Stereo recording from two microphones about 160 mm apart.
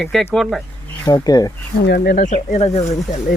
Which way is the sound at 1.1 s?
25° left (ahead or behind).